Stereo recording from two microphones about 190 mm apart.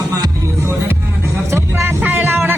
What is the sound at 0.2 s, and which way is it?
Music, 15° right (ahead or behind).